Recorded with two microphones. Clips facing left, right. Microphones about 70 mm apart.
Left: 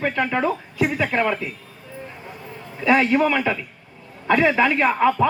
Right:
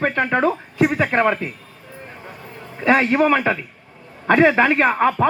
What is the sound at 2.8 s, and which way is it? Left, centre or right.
A man's voice, right.